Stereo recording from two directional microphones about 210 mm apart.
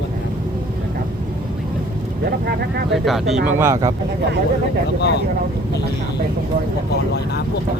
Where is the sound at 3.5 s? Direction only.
15° right (ahead or behind).